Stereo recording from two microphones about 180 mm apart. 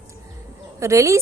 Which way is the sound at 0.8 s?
15° right (ahead or behind).